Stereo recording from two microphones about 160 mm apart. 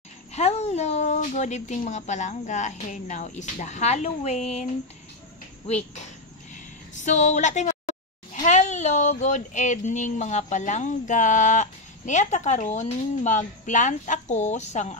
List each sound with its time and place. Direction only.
0.3 s speech: 40° left (ahead or behind)
5.7 s speech: 45° left (ahead or behind)
6.5 s a sound: 50° left (ahead or behind)
8.5 s speech: 50° left (ahead or behind)